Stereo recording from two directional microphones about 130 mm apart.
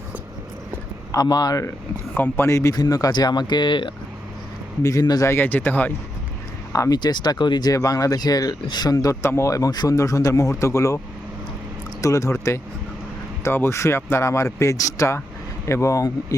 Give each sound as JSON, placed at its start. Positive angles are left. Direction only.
{"t": 1.1, "sound": "speech", "side_deg": 30}
{"t": 2.1, "sound": "speech", "side_deg": 15}
{"t": 4.8, "sound": "speech", "side_deg": 25}
{"t": 6.7, "sound": "speech", "side_deg": 30}
{"t": 12.0, "sound": "speech", "side_deg": 25}